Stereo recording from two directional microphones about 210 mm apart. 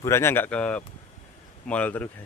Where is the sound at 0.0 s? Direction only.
10° left (ahead or behind).